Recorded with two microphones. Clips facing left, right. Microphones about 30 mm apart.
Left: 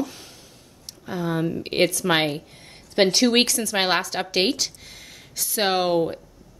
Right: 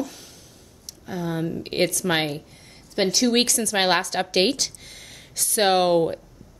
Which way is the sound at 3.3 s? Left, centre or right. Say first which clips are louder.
Left 1 dB; centre.